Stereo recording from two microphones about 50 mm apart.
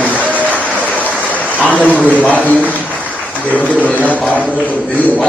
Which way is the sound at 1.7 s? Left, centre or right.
Left.